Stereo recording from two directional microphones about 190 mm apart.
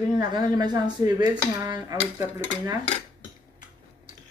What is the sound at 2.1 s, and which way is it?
Speech, 15° right (ahead or behind).